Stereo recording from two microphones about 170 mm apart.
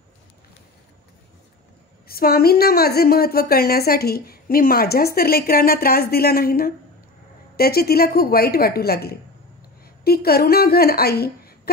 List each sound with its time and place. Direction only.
2.0 s a woman's voice: 65° left (ahead or behind)